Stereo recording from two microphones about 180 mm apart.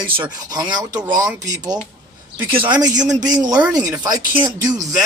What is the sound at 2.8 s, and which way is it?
Speech, 20° right (ahead or behind).